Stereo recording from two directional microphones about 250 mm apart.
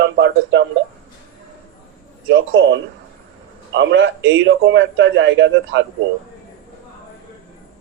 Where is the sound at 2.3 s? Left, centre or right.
Right.